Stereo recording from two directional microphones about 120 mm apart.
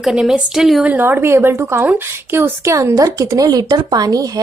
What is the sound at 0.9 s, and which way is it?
A woman's voice, 20° right (ahead or behind).